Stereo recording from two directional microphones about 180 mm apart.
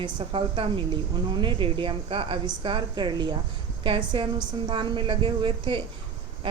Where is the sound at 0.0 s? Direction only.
25° right (ahead or behind).